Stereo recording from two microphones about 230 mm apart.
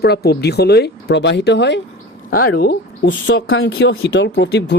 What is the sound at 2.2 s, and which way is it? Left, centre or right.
Speech, left.